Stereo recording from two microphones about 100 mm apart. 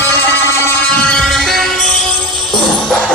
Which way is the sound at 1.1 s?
5° left (ahead or behind).